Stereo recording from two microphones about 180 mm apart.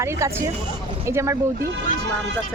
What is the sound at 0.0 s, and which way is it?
Speech, 15° right (ahead or behind).